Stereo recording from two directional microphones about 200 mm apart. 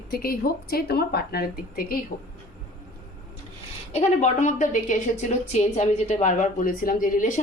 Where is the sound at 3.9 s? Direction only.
35° left (ahead or behind).